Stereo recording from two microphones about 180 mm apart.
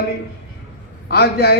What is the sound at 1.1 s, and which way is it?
Speech, 60° left (ahead or behind).